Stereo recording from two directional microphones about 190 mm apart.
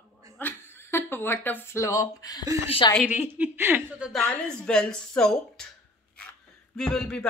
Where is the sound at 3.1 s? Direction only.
10° right (ahead or behind).